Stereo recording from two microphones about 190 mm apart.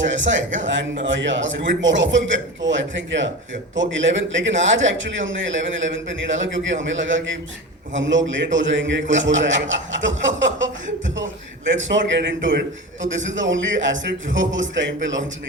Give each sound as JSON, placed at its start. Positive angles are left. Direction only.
{"t": 0.0, "sound": "a man's voice", "side_deg": -75}